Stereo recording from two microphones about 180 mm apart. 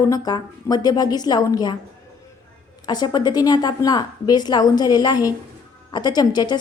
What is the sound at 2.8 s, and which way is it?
A woman's voice, 25° left (ahead or behind).